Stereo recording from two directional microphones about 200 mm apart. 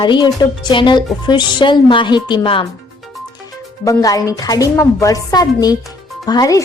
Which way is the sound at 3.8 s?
15° left (ahead or behind).